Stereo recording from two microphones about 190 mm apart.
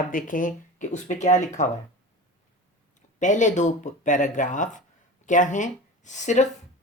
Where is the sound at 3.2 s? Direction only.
40° left (ahead or behind).